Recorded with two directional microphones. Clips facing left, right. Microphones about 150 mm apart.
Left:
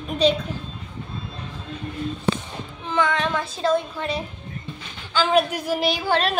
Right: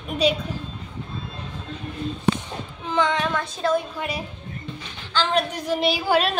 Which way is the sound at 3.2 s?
Centre (ahead or behind).